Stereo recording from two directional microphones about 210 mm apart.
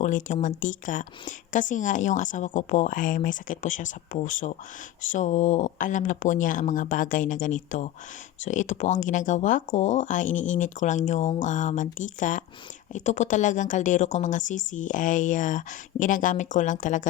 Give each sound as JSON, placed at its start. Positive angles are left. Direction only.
{"t": 0.0, "sound": "a woman's voice", "side_deg": 35}